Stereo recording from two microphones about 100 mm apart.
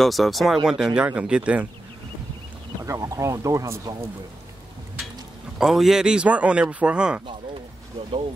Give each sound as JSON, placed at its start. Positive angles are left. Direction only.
{"t": 0.0, "sound": "speech", "side_deg": 0}
{"t": 2.8, "sound": "speech", "side_deg": -30}
{"t": 5.6, "sound": "speech", "side_deg": -5}